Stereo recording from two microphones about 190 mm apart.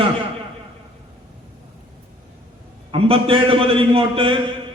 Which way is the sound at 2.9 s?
30° right (ahead or behind).